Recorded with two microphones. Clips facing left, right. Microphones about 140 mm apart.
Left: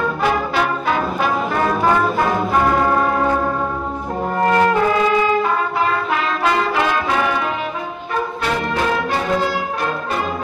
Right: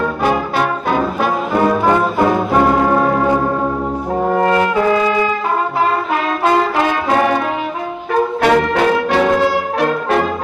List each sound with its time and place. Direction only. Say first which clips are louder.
6.8 s brass instrument: right 4 dB; 45° right (ahead or behind)
8.4 s music: right 9 dB; 70° right (ahead or behind)